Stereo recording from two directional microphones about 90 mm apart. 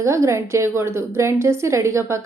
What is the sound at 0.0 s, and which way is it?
A woman's voice, 35° right (ahead or behind).